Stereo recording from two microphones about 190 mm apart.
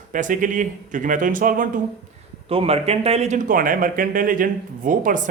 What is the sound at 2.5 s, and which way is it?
Speech, 30° right (ahead or behind).